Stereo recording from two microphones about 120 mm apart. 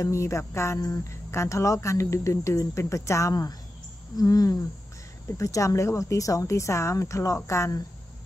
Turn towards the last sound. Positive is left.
turn(degrees=25)  # may be behind; listen again after turning